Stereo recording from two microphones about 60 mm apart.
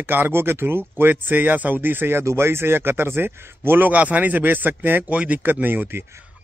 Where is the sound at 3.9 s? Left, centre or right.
Right.